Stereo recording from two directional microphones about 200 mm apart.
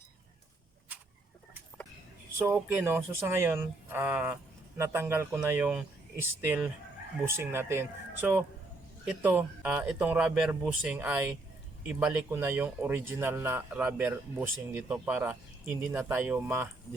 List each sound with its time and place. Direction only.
2.4 s speech: 10° right (ahead or behind)